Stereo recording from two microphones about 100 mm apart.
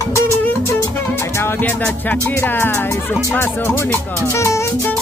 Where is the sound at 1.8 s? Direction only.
10° left (ahead or behind); by 4.9 s 30° left (ahead or behind).